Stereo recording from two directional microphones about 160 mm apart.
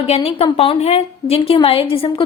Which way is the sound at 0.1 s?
40° left (ahead or behind).